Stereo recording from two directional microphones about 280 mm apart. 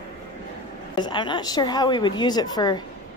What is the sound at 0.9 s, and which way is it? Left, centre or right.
A woman's voice, centre.